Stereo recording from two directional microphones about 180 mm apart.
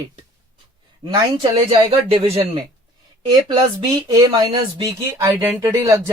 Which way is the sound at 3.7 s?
25° right (ahead or behind).